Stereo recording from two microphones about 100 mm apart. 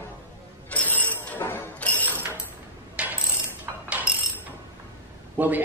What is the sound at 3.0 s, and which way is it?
Ratchet, 15° right (ahead or behind).